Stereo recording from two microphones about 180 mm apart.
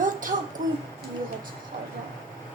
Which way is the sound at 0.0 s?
45° right (ahead or behind).